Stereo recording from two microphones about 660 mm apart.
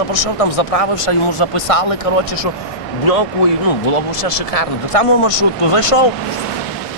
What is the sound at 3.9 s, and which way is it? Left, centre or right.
Speech, left.